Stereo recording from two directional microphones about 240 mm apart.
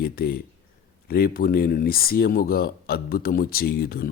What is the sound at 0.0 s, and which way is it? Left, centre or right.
Speech, left.